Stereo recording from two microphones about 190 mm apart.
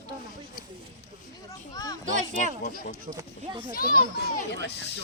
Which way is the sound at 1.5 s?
20° left (ahead or behind).